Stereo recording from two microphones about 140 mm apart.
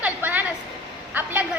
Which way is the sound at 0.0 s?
10° right (ahead or behind).